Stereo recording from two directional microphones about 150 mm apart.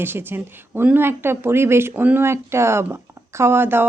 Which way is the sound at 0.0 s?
15° right (ahead or behind).